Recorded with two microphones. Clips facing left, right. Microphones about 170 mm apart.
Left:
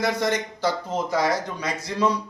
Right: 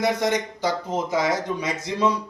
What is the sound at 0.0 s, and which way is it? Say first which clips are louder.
A man's voice: right 1 dB; 20° right (ahead or behind).